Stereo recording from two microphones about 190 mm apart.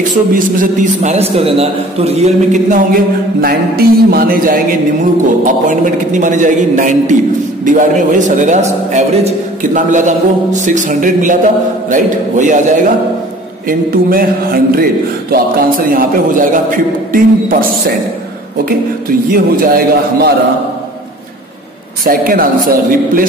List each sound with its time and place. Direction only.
0.3 s a man's voice: 45° right (ahead or behind)
3.3 s a man's voice: 55° right (ahead or behind)
15.9 s a man's voice: 45° right (ahead or behind)
22.0 s a man's voice: 50° right (ahead or behind)